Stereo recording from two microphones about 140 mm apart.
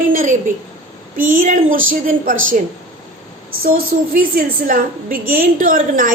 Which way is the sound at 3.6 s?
90° right.